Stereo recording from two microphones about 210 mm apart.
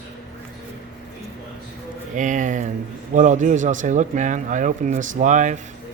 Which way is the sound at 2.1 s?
35° right (ahead or behind).